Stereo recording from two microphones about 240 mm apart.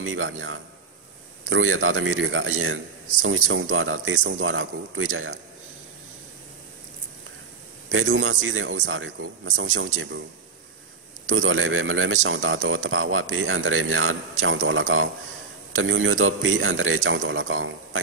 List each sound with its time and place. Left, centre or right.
0.0 s a man's voice: right
7.9 s a man's voice: right
11.2 s a man's voice: right